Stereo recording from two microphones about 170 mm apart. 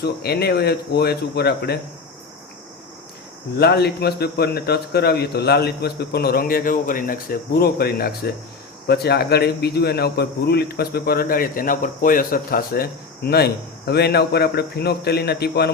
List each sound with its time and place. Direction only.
0.0 s speech: 70° left (ahead or behind)
3.6 s speech: 70° left (ahead or behind)